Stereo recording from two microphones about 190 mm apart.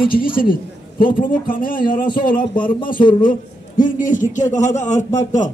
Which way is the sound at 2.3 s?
25° left (ahead or behind).